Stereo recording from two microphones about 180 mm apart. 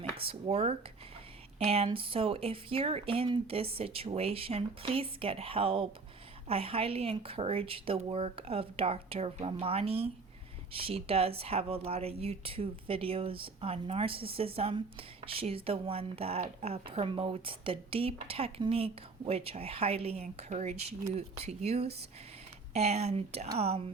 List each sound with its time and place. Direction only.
0.2 s speech: 30° right (ahead or behind)